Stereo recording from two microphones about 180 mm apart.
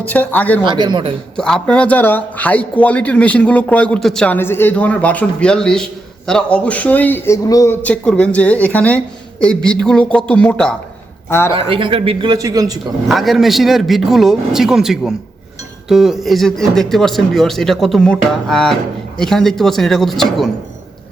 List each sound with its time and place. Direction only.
0.1 s a man's voice: 10° left (ahead or behind)
0.6 s a man's voice: 25° right (ahead or behind)
1.4 s a man's voice: 5° left (ahead or behind)
7.8 s a man's voice: 5° left (ahead or behind)
11.5 s a man's voice: 30° right (ahead or behind)
13.1 s speech: centre (ahead or behind)